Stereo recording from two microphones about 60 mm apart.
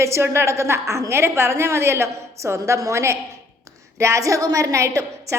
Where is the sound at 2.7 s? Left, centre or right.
Right.